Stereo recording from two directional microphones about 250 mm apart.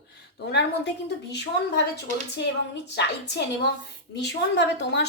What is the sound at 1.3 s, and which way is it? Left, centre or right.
Speech, left.